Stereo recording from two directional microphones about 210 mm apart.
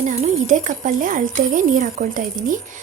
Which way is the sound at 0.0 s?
35° right (ahead or behind).